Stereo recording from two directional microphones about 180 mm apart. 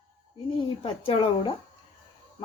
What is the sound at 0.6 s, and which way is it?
Speech, 30° left (ahead or behind).